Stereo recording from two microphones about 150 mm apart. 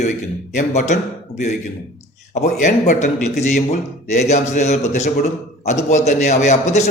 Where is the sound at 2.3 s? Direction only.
50° left (ahead or behind).